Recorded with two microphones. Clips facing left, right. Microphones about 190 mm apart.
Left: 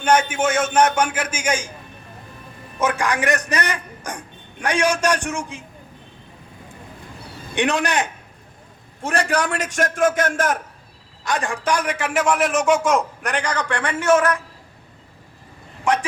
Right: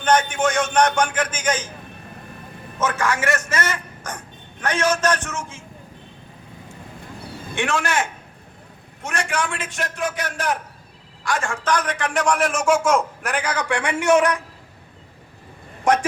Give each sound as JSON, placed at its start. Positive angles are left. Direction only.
{"t": 0.0, "sound": "a man's voice", "side_deg": 10}
{"t": 2.7, "sound": "a man's voice", "side_deg": 15}
{"t": 7.5, "sound": "a man's voice", "side_deg": 20}
{"t": 9.0, "sound": "a man's voice", "side_deg": 35}
{"t": 11.2, "sound": "a man's voice", "side_deg": 20}
{"t": 15.8, "sound": "speech", "side_deg": -45}